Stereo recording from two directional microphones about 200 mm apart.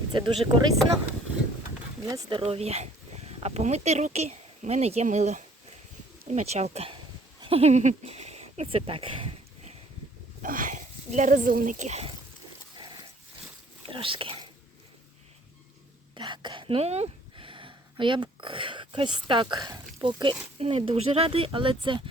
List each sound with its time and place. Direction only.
0.1 s speech: 20° right (ahead or behind)
2.0 s speech: 15° right (ahead or behind)
2.4 s speech: 30° right (ahead or behind)
10.4 s speech: 45° right (ahead or behind)
12.7 s dog: 20° right (ahead or behind)
13.8 s speech: 25° right (ahead or behind)
16.1 s speech: 25° right (ahead or behind)